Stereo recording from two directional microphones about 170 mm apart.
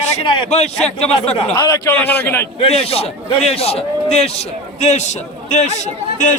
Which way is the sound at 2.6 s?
35° left (ahead or behind).